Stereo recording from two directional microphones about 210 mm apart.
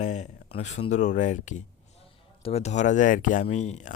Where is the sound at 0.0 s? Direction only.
35° left (ahead or behind).